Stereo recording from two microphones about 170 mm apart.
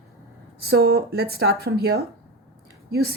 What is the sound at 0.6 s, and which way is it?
A woman's voice, 65° right (ahead or behind).